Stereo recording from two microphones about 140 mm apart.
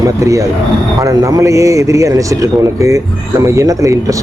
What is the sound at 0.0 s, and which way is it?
Speech, 20° right (ahead or behind).